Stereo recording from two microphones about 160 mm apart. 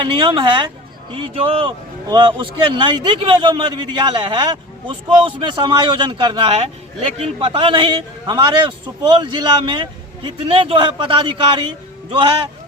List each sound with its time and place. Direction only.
0.0 s a woman's voice: 30° right (ahead or behind)